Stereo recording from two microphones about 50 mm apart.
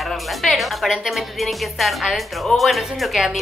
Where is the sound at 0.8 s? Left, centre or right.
Centre.